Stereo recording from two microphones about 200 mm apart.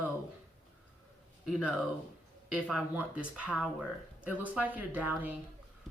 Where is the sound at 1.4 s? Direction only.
Centre (ahead or behind).